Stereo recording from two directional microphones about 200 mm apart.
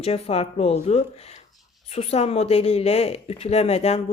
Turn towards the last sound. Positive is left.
turn(degrees=30)  # may be behind; listen again after turning